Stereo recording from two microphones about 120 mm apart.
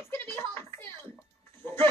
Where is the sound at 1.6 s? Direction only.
20° left (ahead or behind).